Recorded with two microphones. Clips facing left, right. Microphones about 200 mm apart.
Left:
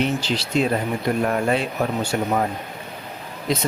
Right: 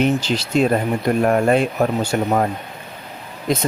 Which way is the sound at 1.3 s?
50° right (ahead or behind).